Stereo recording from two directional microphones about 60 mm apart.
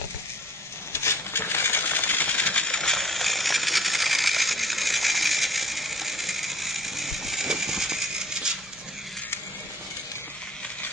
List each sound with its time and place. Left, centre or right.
0.9 s coin: left
2.6 s coin: centre